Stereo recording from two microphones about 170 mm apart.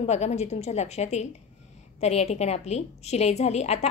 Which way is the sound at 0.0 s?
40° left (ahead or behind).